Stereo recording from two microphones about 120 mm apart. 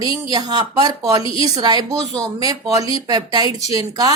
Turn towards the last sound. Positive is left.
turn(degrees=-30)  # may be behind; listen again after turning